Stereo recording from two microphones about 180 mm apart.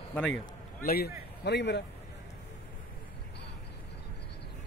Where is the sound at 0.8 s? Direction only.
60° left (ahead or behind).